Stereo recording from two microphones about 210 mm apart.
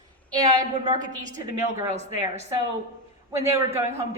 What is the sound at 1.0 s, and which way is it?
Speech, 35° right (ahead or behind).